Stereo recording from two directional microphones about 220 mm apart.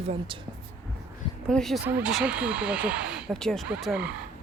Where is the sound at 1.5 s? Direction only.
Centre (ahead or behind).